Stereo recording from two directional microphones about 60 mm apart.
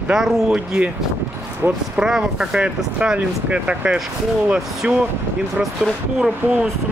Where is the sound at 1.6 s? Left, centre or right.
Right.